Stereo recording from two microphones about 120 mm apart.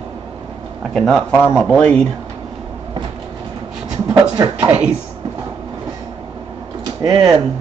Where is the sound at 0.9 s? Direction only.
5° left (ahead or behind).